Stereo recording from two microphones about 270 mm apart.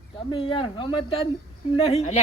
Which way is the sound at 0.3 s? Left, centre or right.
Centre.